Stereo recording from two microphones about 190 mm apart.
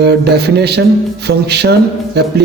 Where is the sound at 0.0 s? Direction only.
60° right (ahead or behind).